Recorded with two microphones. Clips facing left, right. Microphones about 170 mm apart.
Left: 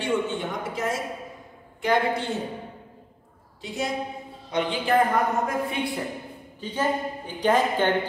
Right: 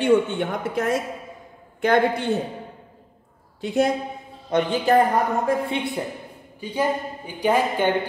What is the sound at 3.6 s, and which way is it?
Speech, 60° right (ahead or behind).